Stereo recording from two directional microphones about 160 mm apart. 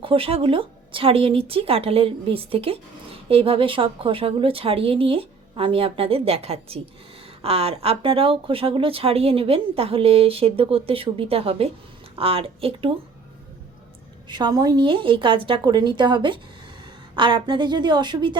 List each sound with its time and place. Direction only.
0.0 s speech: 35° right (ahead or behind)
14.3 s a woman's voice: 25° right (ahead or behind)